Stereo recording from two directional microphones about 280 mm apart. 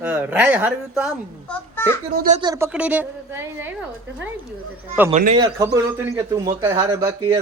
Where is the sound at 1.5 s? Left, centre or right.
Centre.